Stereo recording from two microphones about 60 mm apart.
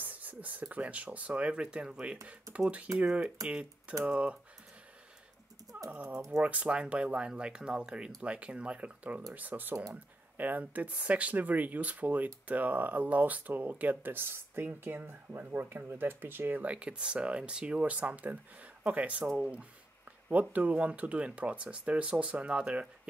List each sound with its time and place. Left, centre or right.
0.0 s speech: right
4.1 s speech: centre
5.7 s dog: right
6.4 s speech: right
16.7 s speech: centre